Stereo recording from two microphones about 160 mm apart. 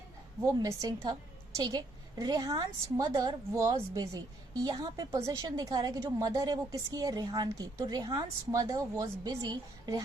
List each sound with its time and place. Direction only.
0.4 s a woman's voice: 20° right (ahead or behind)